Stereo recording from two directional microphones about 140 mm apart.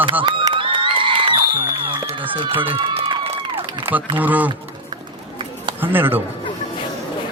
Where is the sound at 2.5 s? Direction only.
15° right (ahead or behind).